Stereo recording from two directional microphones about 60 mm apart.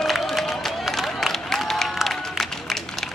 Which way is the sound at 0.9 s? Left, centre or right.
Centre.